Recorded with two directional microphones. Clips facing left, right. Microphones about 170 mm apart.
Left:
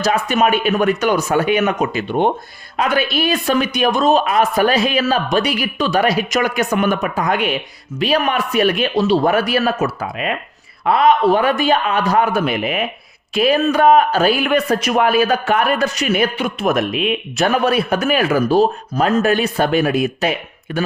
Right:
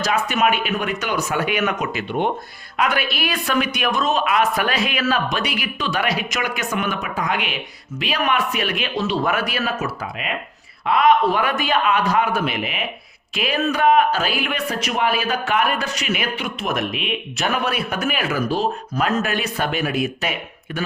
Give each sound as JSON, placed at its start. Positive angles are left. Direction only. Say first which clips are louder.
{"t": 0.0, "sound": "speech", "louder": "left 4 dB", "side_deg": 35}
{"t": 10.8, "sound": "speech", "louder": "left 3 dB", "side_deg": 35}